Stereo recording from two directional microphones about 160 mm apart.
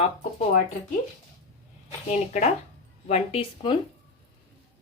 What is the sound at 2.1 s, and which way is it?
Speech, 45° left (ahead or behind).